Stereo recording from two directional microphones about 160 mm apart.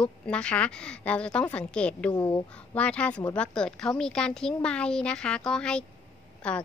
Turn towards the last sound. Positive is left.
turn(degrees=5)  # may be behind; listen again after turning